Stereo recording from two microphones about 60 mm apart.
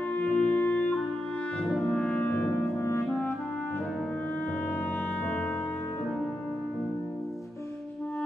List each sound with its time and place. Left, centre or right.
0.1 s music: left